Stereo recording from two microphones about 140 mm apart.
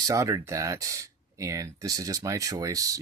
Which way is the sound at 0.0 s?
25° right (ahead or behind).